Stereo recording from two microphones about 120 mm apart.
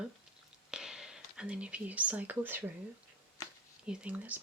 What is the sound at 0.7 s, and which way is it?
Speech, 5° right (ahead or behind).